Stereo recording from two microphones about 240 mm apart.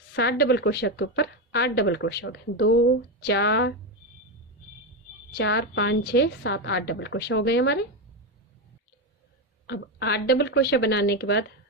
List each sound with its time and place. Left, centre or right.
0.2 s a woman's voice: left
5.4 s a woman's voice: left
9.6 s a woman's voice: left